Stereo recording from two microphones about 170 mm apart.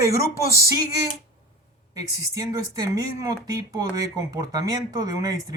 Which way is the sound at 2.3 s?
20° right (ahead or behind).